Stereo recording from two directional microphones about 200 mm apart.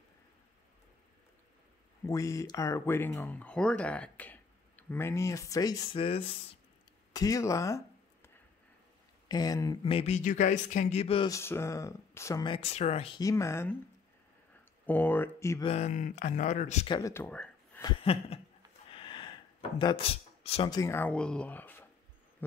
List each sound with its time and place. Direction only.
2.0 s speech: 15° left (ahead or behind)
7.1 s a sound: 15° left (ahead or behind)
9.3 s speech: 20° left (ahead or behind)
11.2 s speech: 15° left (ahead or behind); by 13.2 s 30° left (ahead or behind)
13.2 s speech: 15° left (ahead or behind)
14.9 s speech: 10° left (ahead or behind)
15.6 s speech: 35° left (ahead or behind)
16.9 s speech: 15° left (ahead or behind)
17.8 s a sound: 30° left (ahead or behind)
19.8 s speech: 25° left (ahead or behind); by 21.8 s 10° left (ahead or behind)